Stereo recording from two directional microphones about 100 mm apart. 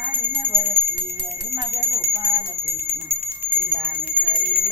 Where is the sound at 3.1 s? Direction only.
20° right (ahead or behind).